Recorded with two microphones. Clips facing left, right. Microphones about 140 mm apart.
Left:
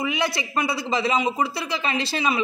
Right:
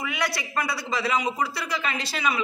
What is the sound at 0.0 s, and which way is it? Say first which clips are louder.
Speech: left 4 dB; 25° left (ahead or behind).